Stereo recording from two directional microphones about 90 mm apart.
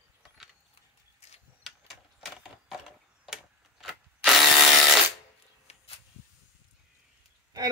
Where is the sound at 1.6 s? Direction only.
Centre (ahead or behind).